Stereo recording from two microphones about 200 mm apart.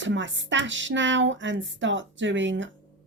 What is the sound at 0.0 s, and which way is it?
Speech, 65° right (ahead or behind).